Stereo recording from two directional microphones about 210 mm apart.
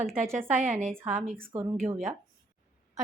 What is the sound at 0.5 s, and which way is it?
Speech, 35° right (ahead or behind).